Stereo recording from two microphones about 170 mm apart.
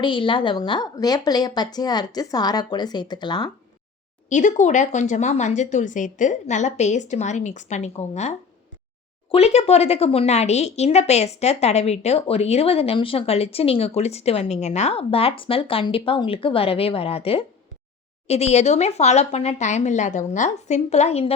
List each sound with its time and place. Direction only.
0.0 s a woman's voice: 30° left (ahead or behind)
4.3 s speech: 45° left (ahead or behind)